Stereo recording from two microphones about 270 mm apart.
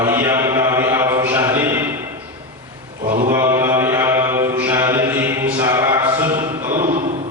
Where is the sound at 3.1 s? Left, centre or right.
Right.